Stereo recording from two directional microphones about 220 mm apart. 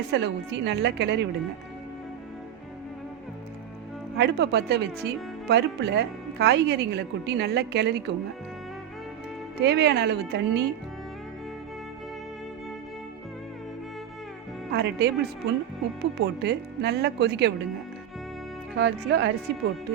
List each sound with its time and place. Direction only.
0.1 s speech: 50° right (ahead or behind)
4.2 s speech: 50° right (ahead or behind)
9.6 s speech: 50° right (ahead or behind)
14.7 s speech: 50° right (ahead or behind)
18.8 s speech: 50° right (ahead or behind)